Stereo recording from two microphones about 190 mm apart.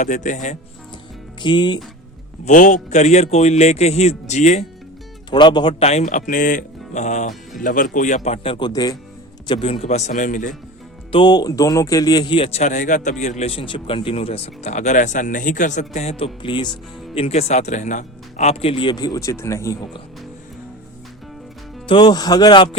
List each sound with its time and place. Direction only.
0.0 s speech: 40° left (ahead or behind)
1.4 s speech: 25° left (ahead or behind)
2.4 s speech: 40° left (ahead or behind)
5.3 s speech: 25° left (ahead or behind); by 10.5 s 45° left (ahead or behind)
11.1 s speech: 25° left (ahead or behind)
21.8 s speech: 25° left (ahead or behind)